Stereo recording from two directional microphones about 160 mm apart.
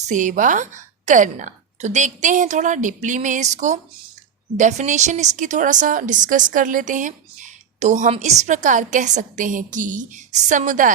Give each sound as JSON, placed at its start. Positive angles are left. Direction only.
{"t": 0.0, "sound": "a woman's voice", "side_deg": -50}